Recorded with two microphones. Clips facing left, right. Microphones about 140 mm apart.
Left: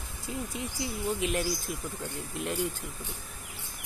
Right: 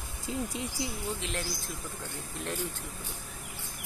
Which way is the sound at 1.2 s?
15° left (ahead or behind).